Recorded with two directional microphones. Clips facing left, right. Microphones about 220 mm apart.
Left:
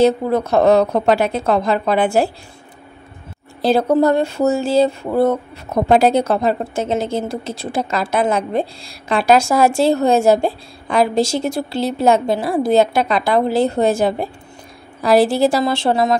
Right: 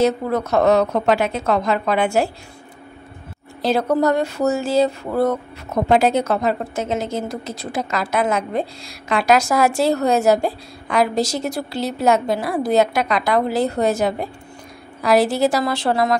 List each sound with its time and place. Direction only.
0.0 s a woman's voice: 30° left (ahead or behind)
3.6 s a woman's voice: 30° left (ahead or behind)